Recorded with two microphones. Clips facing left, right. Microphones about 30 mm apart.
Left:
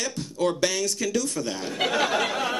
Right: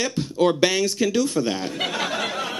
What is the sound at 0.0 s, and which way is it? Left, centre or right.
A man's voice, right.